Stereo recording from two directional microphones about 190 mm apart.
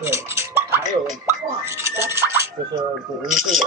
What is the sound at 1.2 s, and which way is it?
Speech, 15° right (ahead or behind).